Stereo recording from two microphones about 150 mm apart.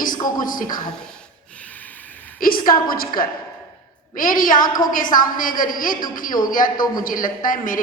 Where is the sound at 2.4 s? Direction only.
70° left (ahead or behind).